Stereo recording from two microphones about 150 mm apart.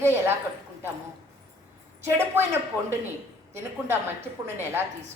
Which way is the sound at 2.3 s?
15° right (ahead or behind).